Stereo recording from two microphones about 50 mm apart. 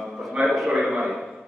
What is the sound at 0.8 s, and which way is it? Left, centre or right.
Speech, centre.